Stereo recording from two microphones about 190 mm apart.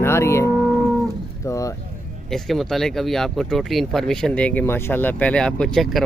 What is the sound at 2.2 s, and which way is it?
Speech, centre (ahead or behind).